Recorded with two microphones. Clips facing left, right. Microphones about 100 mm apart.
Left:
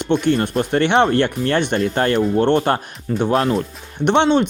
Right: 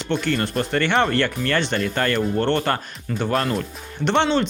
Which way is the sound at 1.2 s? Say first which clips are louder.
Left 4 dB; 20° left (ahead or behind).